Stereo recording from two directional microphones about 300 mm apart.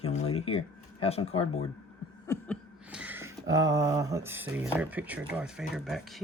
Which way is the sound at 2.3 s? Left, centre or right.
Centre.